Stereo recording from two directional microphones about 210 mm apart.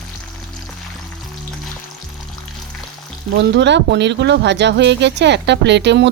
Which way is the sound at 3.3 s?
55° right (ahead or behind).